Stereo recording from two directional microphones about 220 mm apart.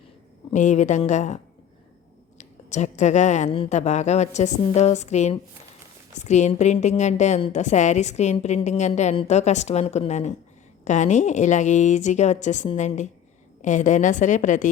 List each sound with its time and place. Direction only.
0.5 s a woman's voice: 35° left (ahead or behind)
2.4 s a woman's voice: 30° left (ahead or behind)